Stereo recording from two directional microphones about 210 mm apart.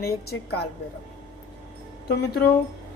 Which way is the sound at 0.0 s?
50° left (ahead or behind).